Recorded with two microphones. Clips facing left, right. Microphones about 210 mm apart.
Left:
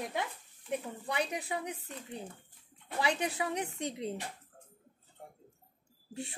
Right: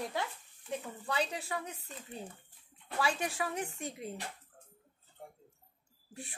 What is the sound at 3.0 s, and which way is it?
Speech, 20° left (ahead or behind).